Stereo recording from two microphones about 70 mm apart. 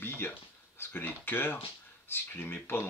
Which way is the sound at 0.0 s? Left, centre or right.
Left.